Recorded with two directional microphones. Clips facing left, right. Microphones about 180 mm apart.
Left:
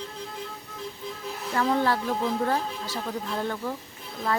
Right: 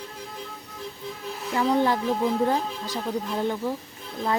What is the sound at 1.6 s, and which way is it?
Speech, 15° right (ahead or behind).